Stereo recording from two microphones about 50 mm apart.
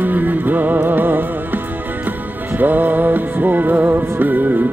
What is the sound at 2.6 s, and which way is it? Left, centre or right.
Music, right.